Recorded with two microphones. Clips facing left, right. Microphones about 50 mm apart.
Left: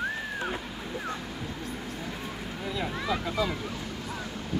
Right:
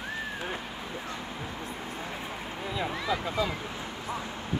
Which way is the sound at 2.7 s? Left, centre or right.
Centre.